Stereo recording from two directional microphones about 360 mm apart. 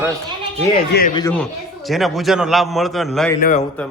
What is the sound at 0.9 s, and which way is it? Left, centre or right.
Speech, left.